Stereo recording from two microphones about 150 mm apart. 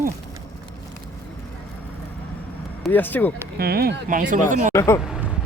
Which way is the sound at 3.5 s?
90° right.